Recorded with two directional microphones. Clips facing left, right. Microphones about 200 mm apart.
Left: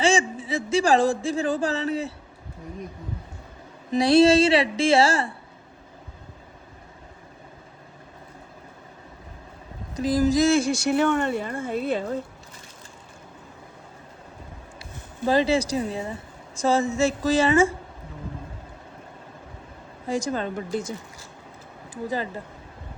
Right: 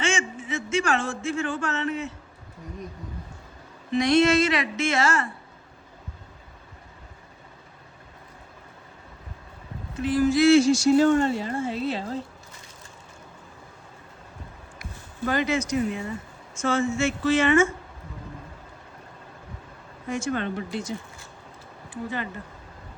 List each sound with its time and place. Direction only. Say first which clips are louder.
0.0 s speech: left 6 dB; 35° left (ahead or behind)
3.9 s a woman's voice: left 3 dB; 30° left (ahead or behind)
9.9 s speech: left 1 dB; 35° left (ahead or behind)
15.3 s a woman's voice: left 4 dB; 30° left (ahead or behind)
20.1 s a woman's voice: left 1 dB; 35° left (ahead or behind)
21.8 s speech: left 3 dB; 35° left (ahead or behind)